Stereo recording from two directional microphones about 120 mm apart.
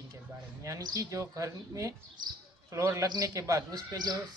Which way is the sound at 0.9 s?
25° right (ahead or behind).